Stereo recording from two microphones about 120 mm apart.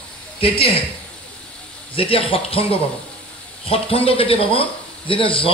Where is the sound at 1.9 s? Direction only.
50° left (ahead or behind).